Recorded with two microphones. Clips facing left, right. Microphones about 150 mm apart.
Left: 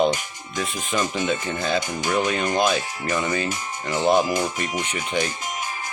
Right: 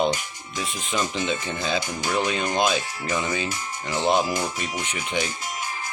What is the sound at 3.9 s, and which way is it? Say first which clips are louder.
Speech: left 3 dB; 15° left (ahead or behind).